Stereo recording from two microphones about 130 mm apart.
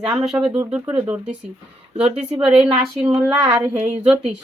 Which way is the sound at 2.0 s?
5° right (ahead or behind).